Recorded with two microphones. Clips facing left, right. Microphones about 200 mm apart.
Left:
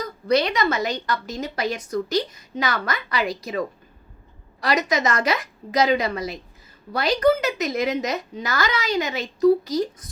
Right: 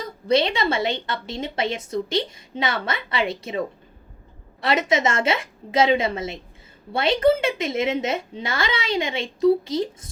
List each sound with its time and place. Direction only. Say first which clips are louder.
0.0 s a woman's voice: even; 25° right (ahead or behind)